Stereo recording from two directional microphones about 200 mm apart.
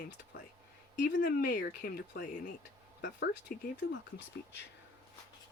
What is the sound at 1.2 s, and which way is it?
Speech, 50° left (ahead or behind).